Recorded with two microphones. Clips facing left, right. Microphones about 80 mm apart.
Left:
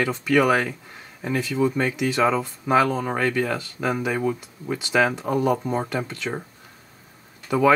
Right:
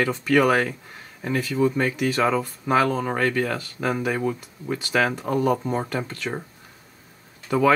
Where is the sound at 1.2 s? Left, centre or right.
Centre.